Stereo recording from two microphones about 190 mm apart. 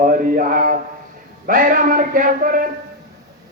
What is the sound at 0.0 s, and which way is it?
Speech, 45° right (ahead or behind).